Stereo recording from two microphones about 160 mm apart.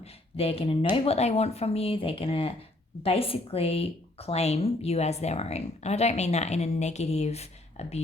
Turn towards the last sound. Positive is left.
turn(degrees=40)  # may be behind; listen again after turning